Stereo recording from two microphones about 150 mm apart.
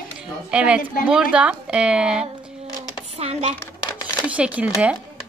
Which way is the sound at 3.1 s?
45° right (ahead or behind).